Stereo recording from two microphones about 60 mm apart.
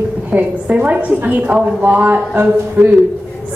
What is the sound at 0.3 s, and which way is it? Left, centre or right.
A woman's voice, right.